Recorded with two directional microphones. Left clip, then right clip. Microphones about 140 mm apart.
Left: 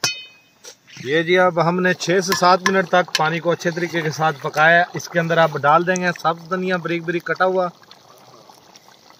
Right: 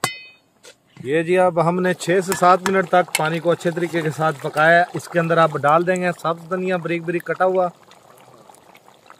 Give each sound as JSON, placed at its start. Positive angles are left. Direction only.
{"t": 1.1, "sound": "speech", "side_deg": -45}
{"t": 2.8, "sound": "speech", "side_deg": -45}
{"t": 5.6, "sound": "speech", "side_deg": -35}